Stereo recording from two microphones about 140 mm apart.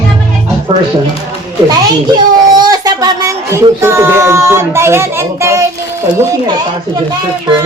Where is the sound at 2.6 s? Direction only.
30° right (ahead or behind).